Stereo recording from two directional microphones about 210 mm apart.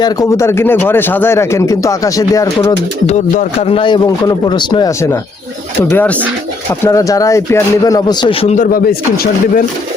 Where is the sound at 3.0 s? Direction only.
30° left (ahead or behind).